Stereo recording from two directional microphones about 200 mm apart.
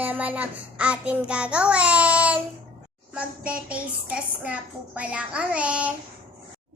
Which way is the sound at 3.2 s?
5° right (ahead or behind).